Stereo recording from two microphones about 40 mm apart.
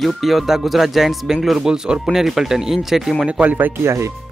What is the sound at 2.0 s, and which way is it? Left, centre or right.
Speech, centre.